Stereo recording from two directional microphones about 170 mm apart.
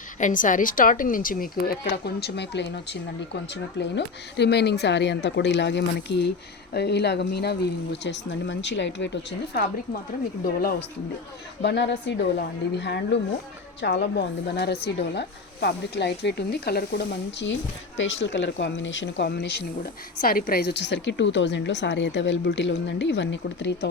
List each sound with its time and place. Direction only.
0.2 s a woman's voice: 50° left (ahead or behind); by 6.2 s 90° left
6.7 s a woman's voice: 80° left
10.4 s a woman's voice: 60° left (ahead or behind)
11.6 s a woman's voice: 90° left